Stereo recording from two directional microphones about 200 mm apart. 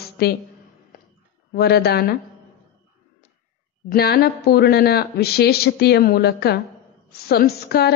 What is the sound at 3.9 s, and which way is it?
Speech, 50° left (ahead or behind).